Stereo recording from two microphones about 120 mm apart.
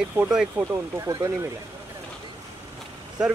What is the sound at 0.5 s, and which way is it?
Speech, 25° right (ahead or behind).